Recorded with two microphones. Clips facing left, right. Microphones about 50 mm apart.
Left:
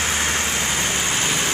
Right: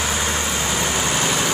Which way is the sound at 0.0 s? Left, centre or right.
Left.